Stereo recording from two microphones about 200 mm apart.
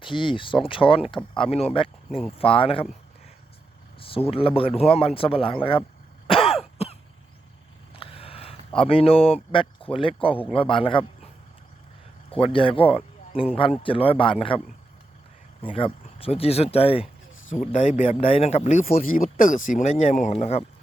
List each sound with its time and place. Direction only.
0.0 s speech: 25° left (ahead or behind)
2.0 s speech: centre (ahead or behind)
2.4 s speech: 30° left (ahead or behind)
4.0 s speech: 30° left (ahead or behind)
6.2 s throat clearing: 25° left (ahead or behind)
7.9 s a sound: 30° left (ahead or behind)
10.4 s speech: 25° left (ahead or behind)
12.5 s speech: 25° left (ahead or behind)
15.6 s speech: 25° left (ahead or behind)
18.9 s speech: 45° left (ahead or behind)